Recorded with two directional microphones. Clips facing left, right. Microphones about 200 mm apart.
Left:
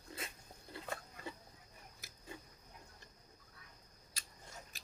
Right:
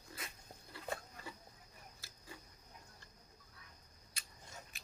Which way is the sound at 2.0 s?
20° left (ahead or behind).